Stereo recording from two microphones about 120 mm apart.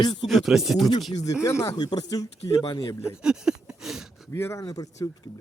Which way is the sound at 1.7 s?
35° left (ahead or behind).